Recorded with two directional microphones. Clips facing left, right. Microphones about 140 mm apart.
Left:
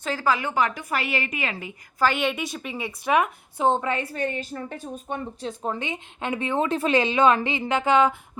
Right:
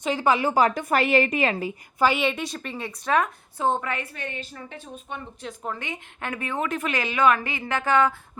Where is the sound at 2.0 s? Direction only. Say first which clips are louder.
Right 1 dB; centre (ahead or behind); by 8.2 s 20° left (ahead or behind).